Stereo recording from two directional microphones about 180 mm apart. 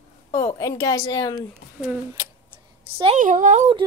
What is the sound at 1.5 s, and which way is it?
Speech, 10° right (ahead or behind).